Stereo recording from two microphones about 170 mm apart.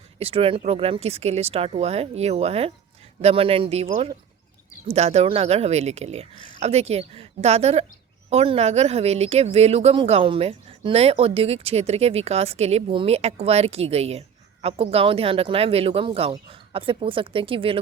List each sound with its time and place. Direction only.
0.2 s speech: 35° right (ahead or behind)